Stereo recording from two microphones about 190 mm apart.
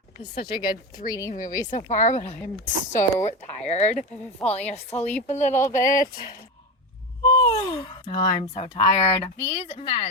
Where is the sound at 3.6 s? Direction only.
35° left (ahead or behind).